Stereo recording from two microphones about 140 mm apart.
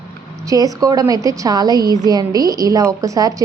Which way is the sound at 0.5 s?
25° right (ahead or behind).